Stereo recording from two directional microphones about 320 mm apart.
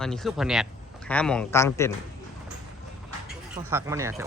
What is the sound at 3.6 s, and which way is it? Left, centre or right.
Speech, centre.